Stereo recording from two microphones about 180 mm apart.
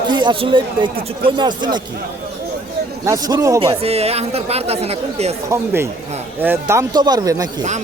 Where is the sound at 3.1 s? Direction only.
20° right (ahead or behind).